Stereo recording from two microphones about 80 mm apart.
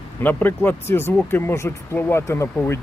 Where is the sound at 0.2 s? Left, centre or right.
Left.